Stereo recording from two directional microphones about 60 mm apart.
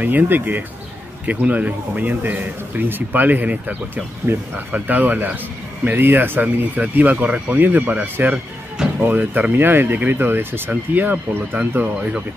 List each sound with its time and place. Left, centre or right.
0.0 s speech: right
4.3 s speech: right
4.7 s speech: right